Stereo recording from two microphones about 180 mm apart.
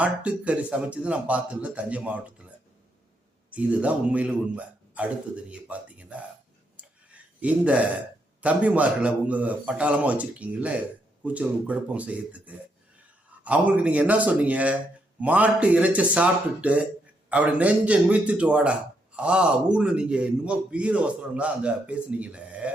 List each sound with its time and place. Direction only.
0.0 s a man's voice: 5° right (ahead or behind)
3.5 s a man's voice: 5° right (ahead or behind)